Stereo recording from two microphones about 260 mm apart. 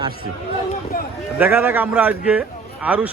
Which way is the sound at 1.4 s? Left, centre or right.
Centre.